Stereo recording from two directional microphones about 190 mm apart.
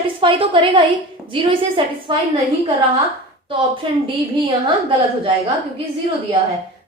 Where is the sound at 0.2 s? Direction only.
25° right (ahead or behind).